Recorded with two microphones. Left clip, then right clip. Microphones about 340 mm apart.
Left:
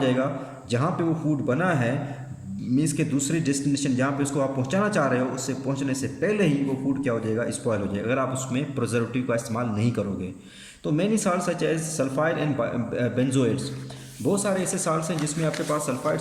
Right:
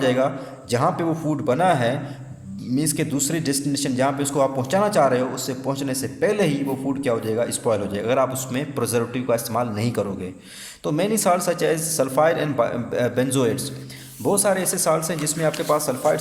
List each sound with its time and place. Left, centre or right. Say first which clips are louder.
0.0 s a man's voice: right 4 dB; centre